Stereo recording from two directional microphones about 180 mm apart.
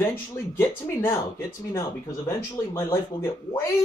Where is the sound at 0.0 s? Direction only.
15° left (ahead or behind).